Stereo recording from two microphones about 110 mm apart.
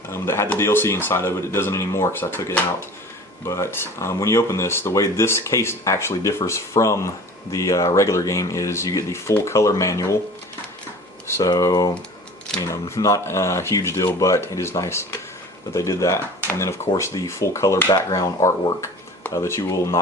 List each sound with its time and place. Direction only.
0.1 s speech: 25° left (ahead or behind)
11.3 s speech: 25° left (ahead or behind)
11.5 s speech: 35° left (ahead or behind)